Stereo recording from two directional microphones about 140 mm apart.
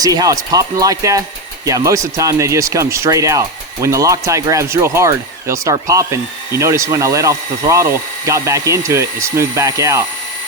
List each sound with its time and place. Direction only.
0.0 s speech: 25° right (ahead or behind)